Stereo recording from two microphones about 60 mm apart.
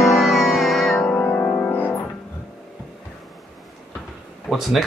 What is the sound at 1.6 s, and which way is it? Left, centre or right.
Music, left.